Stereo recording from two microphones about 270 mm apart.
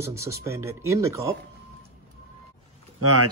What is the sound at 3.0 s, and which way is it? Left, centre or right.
Speech, right.